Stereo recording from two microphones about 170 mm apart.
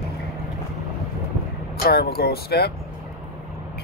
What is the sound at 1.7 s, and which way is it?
Speech, 65° left (ahead or behind).